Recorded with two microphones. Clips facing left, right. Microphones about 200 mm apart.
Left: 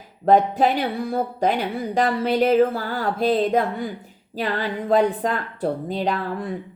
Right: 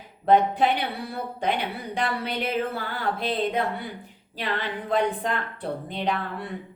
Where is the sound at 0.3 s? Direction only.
40° left (ahead or behind).